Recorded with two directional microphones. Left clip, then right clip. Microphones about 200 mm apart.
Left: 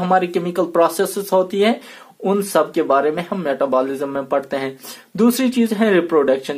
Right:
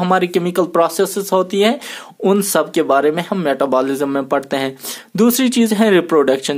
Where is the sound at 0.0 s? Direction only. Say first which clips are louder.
Right 2 dB; 35° right (ahead or behind).